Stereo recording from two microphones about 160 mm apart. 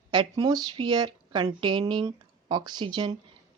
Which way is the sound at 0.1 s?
30° right (ahead or behind).